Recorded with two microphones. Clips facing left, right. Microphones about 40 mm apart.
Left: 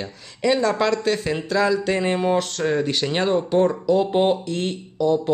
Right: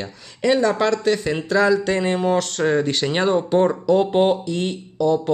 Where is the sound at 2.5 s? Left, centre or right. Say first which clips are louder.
Right 2 dB; centre.